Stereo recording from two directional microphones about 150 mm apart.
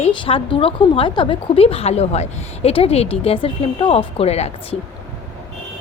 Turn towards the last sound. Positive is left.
turn(degrees=45)  # may be behind; listen again after turning